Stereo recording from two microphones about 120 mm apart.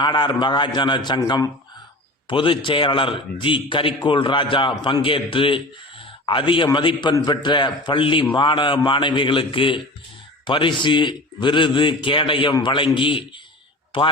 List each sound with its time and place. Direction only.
0.0 s a man's voice: 40° left (ahead or behind)
2.2 s a man's voice: 45° left (ahead or behind)